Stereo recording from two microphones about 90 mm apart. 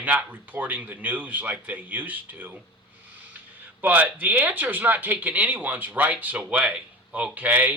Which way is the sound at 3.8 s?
20° right (ahead or behind).